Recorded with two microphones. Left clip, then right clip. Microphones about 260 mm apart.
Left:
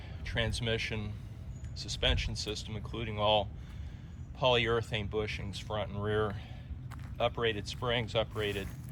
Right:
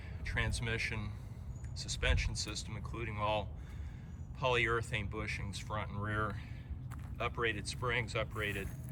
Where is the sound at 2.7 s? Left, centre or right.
Centre.